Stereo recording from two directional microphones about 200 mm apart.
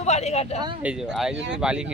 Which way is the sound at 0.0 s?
35° left (ahead or behind).